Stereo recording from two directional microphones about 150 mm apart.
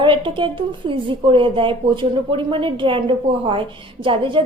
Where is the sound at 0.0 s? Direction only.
35° right (ahead or behind).